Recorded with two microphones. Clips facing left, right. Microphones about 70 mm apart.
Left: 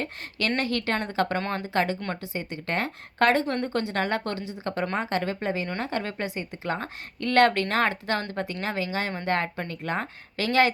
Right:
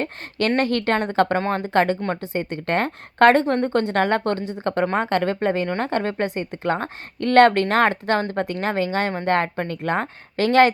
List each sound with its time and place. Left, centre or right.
0.0 s speech: right
1.4 s speech: right
1.6 s speech: right